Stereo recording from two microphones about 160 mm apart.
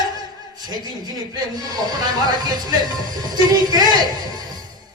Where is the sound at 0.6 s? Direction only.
25° right (ahead or behind).